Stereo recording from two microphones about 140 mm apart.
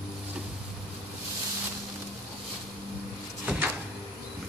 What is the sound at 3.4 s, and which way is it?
Cupboard open or close, 15° right (ahead or behind).